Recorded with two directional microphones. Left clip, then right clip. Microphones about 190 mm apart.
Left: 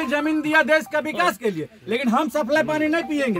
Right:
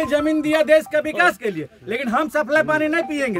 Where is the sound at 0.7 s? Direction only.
30° right (ahead or behind).